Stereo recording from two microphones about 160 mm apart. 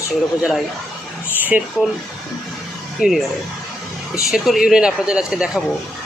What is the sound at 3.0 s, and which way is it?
Speech, 5° right (ahead or behind).